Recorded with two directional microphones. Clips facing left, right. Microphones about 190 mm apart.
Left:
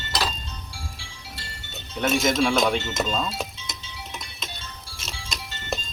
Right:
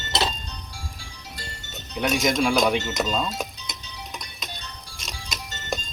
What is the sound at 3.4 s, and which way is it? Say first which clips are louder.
Music: even; centre (ahead or behind).